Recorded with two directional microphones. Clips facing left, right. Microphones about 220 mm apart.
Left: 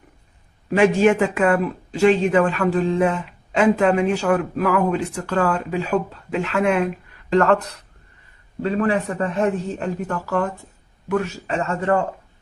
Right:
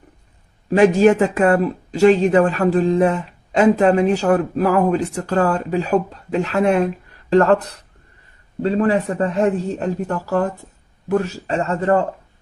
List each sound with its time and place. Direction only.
0.7 s speech: 40° right (ahead or behind)